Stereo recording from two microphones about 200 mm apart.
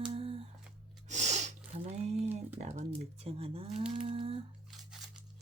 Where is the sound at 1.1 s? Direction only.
35° right (ahead or behind).